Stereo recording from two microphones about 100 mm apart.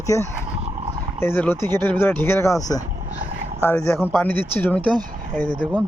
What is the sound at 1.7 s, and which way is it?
Speech, 45° right (ahead or behind).